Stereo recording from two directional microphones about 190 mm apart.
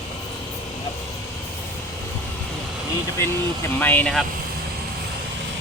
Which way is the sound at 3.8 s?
10° left (ahead or behind).